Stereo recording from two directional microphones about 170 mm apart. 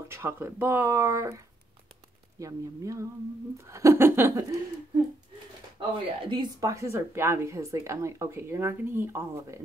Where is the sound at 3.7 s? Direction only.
15° right (ahead or behind).